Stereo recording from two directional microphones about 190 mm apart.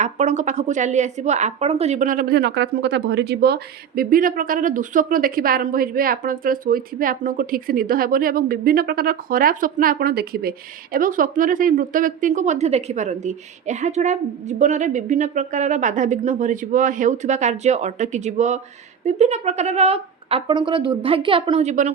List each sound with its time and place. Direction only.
0.0 s a woman's voice: 35° right (ahead or behind)